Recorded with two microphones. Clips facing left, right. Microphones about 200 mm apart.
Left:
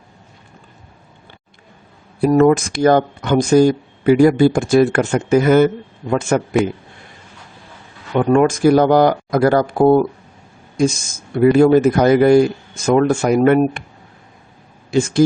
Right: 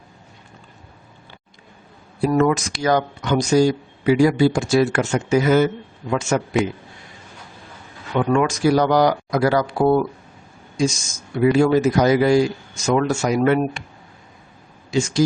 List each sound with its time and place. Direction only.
2.3 s speech: 45° left (ahead or behind)
8.2 s speech: 45° left (ahead or behind)
14.8 s speech: 55° left (ahead or behind)